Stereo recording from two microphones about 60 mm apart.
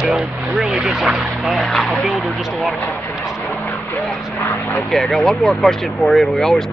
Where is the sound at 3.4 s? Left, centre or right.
Left.